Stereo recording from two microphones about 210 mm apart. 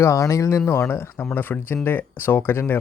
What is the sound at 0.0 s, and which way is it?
Speech, 15° left (ahead or behind).